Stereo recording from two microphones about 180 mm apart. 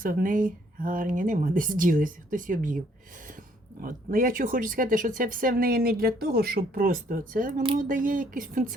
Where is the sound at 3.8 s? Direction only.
50° right (ahead or behind).